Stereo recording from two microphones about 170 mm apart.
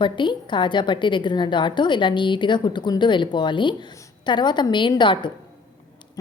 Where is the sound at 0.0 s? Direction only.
25° left (ahead or behind).